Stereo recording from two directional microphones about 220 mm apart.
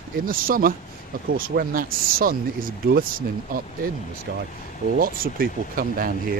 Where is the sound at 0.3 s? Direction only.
40° right (ahead or behind).